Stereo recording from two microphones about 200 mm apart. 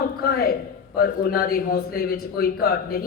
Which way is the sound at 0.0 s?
50° left (ahead or behind).